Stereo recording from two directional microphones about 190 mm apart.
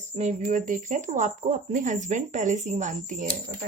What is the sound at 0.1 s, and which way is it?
Speech, 40° right (ahead or behind).